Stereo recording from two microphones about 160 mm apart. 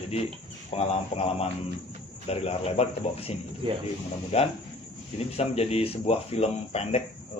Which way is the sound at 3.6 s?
35° right (ahead or behind).